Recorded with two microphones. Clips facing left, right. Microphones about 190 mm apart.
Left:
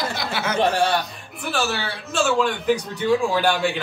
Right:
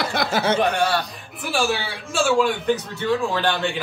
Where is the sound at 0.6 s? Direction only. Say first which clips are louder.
Left 1 dB; 30° left (ahead or behind).